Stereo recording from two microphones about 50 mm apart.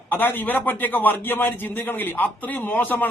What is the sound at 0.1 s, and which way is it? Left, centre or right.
A man's voice, left.